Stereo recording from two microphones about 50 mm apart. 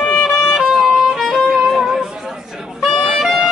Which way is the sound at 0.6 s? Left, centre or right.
Centre.